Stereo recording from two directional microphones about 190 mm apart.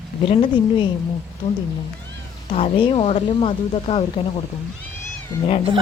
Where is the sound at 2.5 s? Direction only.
30° left (ahead or behind).